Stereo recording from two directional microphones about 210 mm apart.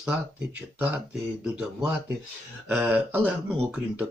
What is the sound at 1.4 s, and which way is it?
Speech, 5° right (ahead or behind).